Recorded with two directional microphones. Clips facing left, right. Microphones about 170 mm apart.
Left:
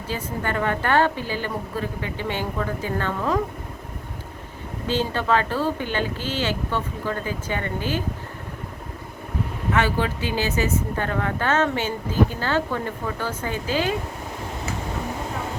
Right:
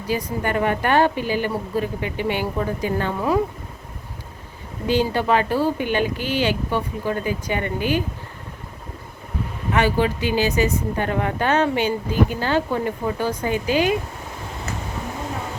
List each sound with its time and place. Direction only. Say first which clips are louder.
0.1 s speech: right 4 dB; 15° right (ahead or behind)
4.9 s speech: right 3 dB; 15° right (ahead or behind)
9.7 s speech: right 4 dB; 15° right (ahead or behind)